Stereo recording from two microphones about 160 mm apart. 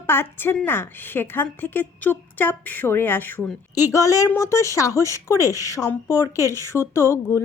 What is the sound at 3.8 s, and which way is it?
A woman's voice, 20° left (ahead or behind).